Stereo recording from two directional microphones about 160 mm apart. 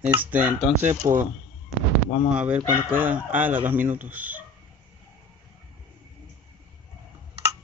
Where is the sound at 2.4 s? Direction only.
10° right (ahead or behind).